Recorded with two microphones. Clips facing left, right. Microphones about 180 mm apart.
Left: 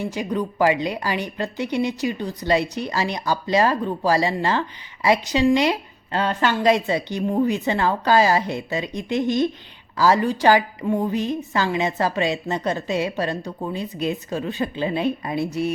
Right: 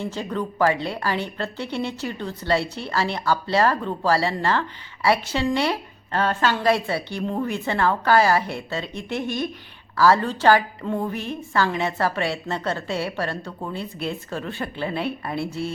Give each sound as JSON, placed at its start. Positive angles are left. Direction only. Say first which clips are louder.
{"t": 0.0, "sound": "a woman's voice", "louder": "left 3 dB", "side_deg": 15}